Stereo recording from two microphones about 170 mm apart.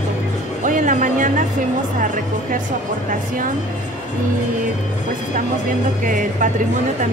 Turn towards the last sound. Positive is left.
turn(degrees=-55)  # may be behind; listen again after turning